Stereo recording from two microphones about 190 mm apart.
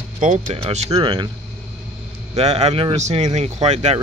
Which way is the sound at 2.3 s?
35° right (ahead or behind).